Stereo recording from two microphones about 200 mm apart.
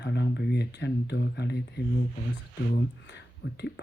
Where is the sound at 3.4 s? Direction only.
55° left (ahead or behind).